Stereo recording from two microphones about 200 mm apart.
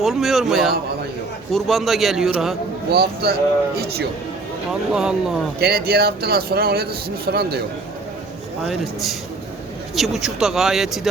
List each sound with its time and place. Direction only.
0.0 s speech: centre (ahead or behind)
2.9 s speech: 50° right (ahead or behind)
4.7 s speech: 5° right (ahead or behind)
5.5 s speech: 50° right (ahead or behind)
8.6 s speech: centre (ahead or behind)